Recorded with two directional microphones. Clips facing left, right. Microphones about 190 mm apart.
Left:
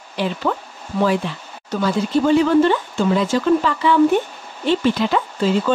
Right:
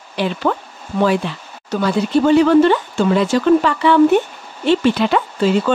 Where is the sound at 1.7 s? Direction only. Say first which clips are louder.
Right 2 dB; 65° right (ahead or behind).